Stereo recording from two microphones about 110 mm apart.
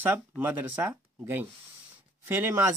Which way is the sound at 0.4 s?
15° right (ahead or behind).